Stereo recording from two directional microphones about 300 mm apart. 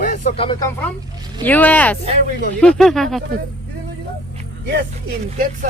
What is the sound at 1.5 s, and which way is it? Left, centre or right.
Music, centre.